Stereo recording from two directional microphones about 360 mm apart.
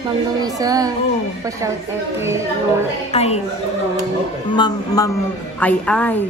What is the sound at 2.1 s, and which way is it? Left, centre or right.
Child singing, centre.